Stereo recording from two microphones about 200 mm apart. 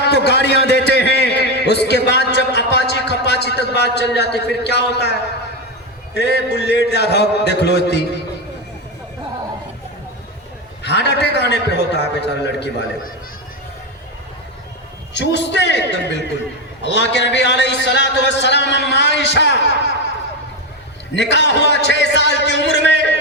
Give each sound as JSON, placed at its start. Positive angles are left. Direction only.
{"t": 0.0, "sound": "a sound", "side_deg": 60}
{"t": 6.1, "sound": "a man's voice", "side_deg": 55}
{"t": 10.8, "sound": "a man's voice", "side_deg": 60}
{"t": 15.1, "sound": "a man's voice", "side_deg": 60}
{"t": 21.2, "sound": "a man's voice", "side_deg": 60}